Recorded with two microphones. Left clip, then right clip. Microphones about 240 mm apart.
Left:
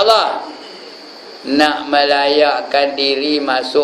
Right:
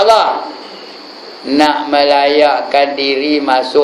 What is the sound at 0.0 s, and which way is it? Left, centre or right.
Speech, centre.